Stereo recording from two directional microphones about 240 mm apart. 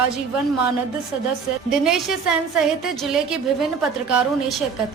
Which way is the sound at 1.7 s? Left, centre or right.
Centre.